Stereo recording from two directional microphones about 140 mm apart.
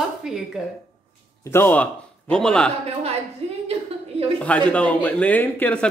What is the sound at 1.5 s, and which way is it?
A man's voice, 15° left (ahead or behind).